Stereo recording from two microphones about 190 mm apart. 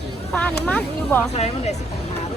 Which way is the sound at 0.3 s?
5° left (ahead or behind).